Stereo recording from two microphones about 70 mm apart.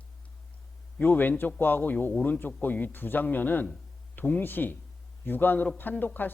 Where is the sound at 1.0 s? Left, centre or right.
Left.